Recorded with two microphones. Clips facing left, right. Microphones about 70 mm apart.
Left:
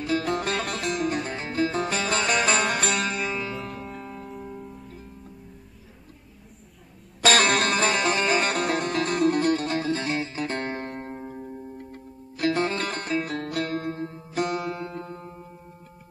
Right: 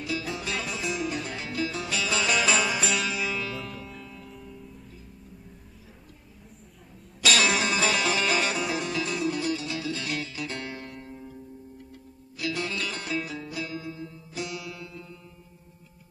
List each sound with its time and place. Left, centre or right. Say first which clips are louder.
0.0 s music: left 7 dB; left
3.5 s music: left 3 dB; centre
4.0 s music: left 7 dB; left
7.2 s music: left 4 dB; left
12.4 s music: left 7 dB; left